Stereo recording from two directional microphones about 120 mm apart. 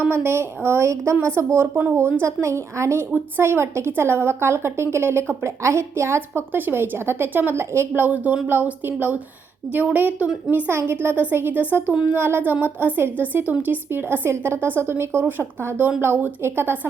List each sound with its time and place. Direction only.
0.0 s a woman's voice: 20° right (ahead or behind)